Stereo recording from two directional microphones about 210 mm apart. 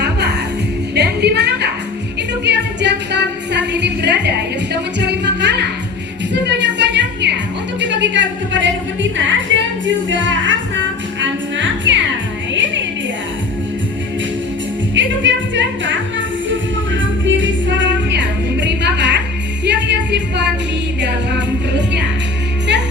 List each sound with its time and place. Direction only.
0.0 s music: 55° right (ahead or behind)
14.9 s music: 60° right (ahead or behind)